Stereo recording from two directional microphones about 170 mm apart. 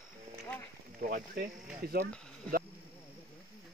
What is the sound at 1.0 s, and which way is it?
Speech, 60° right (ahead or behind).